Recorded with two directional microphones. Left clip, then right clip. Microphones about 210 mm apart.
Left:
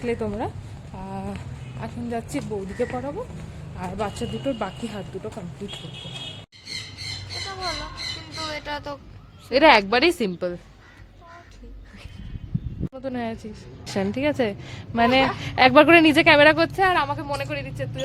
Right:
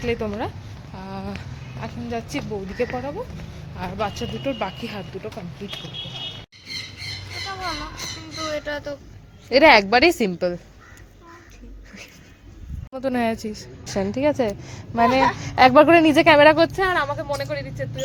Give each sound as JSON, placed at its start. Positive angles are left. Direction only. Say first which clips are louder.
{"t": 0.0, "sound": "speech", "louder": "right 1 dB", "side_deg": 10}
{"t": 0.9, "sound": "a sound", "louder": "even", "side_deg": 15}
{"t": 1.8, "sound": "speech", "louder": "right 1 dB", "side_deg": 15}
{"t": 8.4, "sound": "a sound", "louder": "right 4 dB", "side_deg": 35}
{"t": 9.5, "sound": "a woman's voice", "louder": "right 2 dB", "side_deg": 0}
{"t": 12.9, "sound": "a woman's voice", "louder": "right 8 dB", "side_deg": -35}
{"t": 13.8, "sound": "a woman's voice", "louder": "right 3 dB", "side_deg": 0}